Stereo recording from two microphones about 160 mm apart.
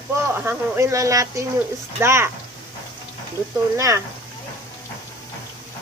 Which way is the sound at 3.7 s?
20° right (ahead or behind).